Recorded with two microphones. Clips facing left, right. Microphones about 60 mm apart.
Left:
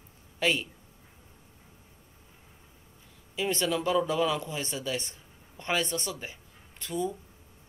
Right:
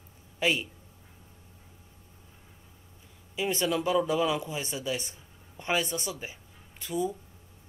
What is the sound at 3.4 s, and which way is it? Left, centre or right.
Speech, centre.